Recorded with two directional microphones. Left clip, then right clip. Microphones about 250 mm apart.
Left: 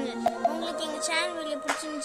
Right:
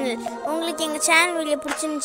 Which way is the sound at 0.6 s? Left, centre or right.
Right.